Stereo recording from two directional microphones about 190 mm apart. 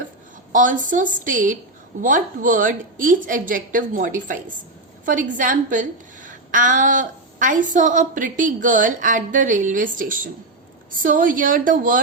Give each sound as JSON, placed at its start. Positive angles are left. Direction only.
{"t": 0.5, "sound": "a woman's voice", "side_deg": -45}